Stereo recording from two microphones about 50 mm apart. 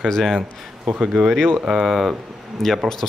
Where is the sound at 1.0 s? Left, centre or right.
Centre.